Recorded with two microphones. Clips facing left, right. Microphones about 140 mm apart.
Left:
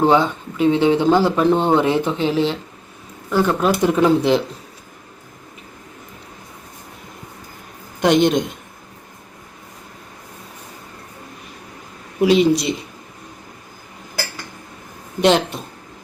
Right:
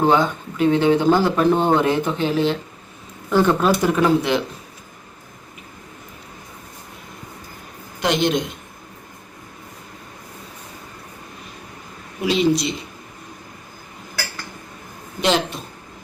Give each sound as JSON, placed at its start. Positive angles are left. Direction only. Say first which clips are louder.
{"t": 0.2, "sound": "speech", "louder": "left 1 dB", "side_deg": 25}
{"t": 1.0, "sound": "speech", "louder": "left 1 dB", "side_deg": 0}
{"t": 1.8, "sound": "speech", "louder": "left 1 dB", "side_deg": 25}
{"t": 3.3, "sound": "speech", "louder": "right 1 dB", "side_deg": 10}
{"t": 3.8, "sound": "speech", "louder": "left 2 dB", "side_deg": 20}
{"t": 8.0, "sound": "a man's voice", "louder": "left 5 dB", "side_deg": 50}
{"t": 12.2, "sound": "speech", "louder": "left 4 dB", "side_deg": 60}
{"t": 15.2, "sound": "speech", "louder": "left 4 dB", "side_deg": 55}